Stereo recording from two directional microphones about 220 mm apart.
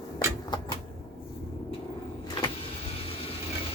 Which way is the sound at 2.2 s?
20° left (ahead or behind).